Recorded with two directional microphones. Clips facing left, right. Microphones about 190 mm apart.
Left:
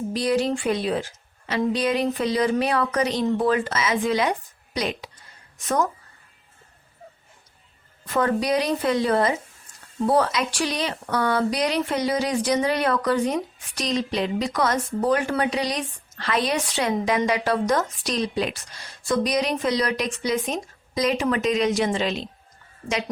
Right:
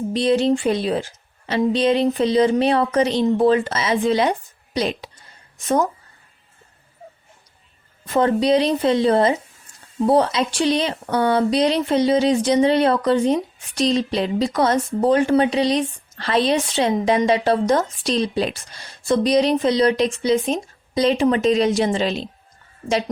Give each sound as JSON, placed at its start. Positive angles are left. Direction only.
{"t": 0.1, "sound": "speech", "side_deg": -25}
{"t": 8.0, "sound": "speech", "side_deg": -25}